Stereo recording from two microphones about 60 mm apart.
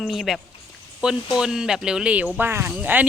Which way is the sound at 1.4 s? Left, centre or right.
Centre.